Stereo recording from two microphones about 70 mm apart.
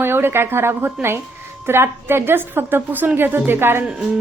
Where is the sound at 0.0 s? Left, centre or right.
Right.